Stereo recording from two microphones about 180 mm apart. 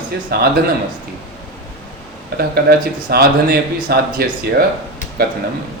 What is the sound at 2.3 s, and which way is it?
Speech, 60° right (ahead or behind).